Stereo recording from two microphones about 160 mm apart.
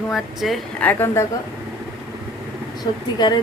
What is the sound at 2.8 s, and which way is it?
Speech, 25° left (ahead or behind).